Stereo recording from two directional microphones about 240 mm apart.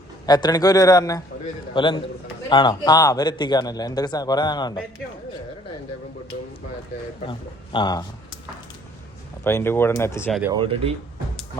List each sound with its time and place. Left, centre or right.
0.3 s speech: centre
7.3 s speech: centre
9.4 s speech: centre
10.5 s speech: right